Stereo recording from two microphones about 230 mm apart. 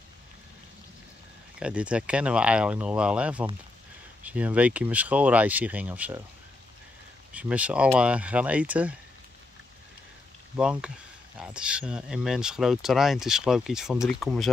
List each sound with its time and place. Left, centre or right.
1.6 s speech: centre
7.3 s speech: centre
10.5 s speech: centre